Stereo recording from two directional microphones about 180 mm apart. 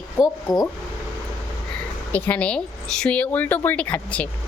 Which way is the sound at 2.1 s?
10° left (ahead or behind).